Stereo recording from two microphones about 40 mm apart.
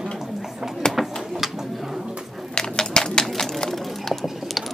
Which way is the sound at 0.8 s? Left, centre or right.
Centre.